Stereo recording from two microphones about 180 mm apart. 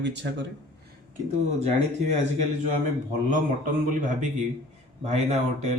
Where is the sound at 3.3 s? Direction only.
45° right (ahead or behind).